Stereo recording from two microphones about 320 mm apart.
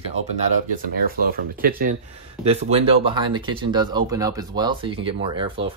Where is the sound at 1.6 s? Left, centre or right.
Right.